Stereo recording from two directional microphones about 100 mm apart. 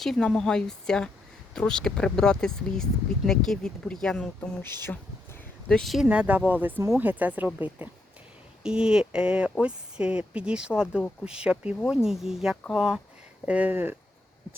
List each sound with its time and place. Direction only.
0.0 s speech: 5° left (ahead or behind)
4.8 s a sound: 20° left (ahead or behind)
5.6 s speech: 5° left (ahead or behind)
6.1 s speech: 15° right (ahead or behind)